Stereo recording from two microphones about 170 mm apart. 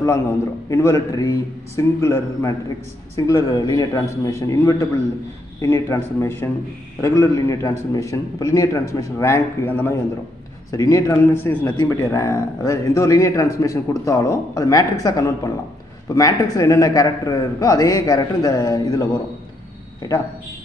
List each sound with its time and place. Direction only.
0.7 s a man's voice: 20° left (ahead or behind)